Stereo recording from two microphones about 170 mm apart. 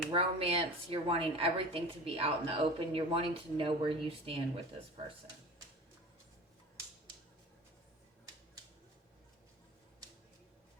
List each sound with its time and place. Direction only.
0.1 s a woman's voice: 35° right (ahead or behind)